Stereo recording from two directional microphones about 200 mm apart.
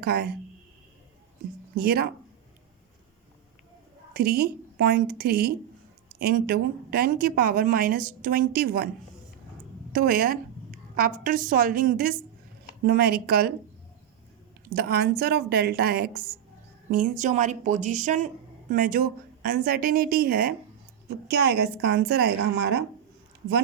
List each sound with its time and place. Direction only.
0.0 s speech: 50° right (ahead or behind)
1.7 s speech: 50° right (ahead or behind)
4.1 s speech: 50° right (ahead or behind)
9.9 s a woman's voice: 45° right (ahead or behind)
14.7 s a woman's voice: 50° right (ahead or behind)